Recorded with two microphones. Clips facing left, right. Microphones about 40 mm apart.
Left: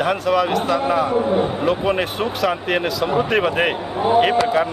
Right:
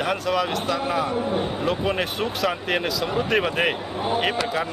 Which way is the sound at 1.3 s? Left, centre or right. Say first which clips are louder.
Left 5 dB; centre.